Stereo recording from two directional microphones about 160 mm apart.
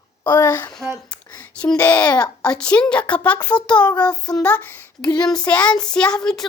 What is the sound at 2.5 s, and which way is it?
Speech, 5° left (ahead or behind).